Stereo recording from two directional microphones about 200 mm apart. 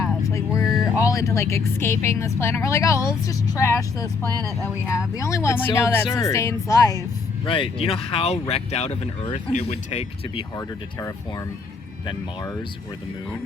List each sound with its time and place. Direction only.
0.2 s a sound: 15° left (ahead or behind)
0.9 s a woman's voice: 15° left (ahead or behind)
4.3 s speech: 20° right (ahead or behind)
4.9 s a woman's voice: 15° left (ahead or behind); by 10.4 s 30° left (ahead or behind)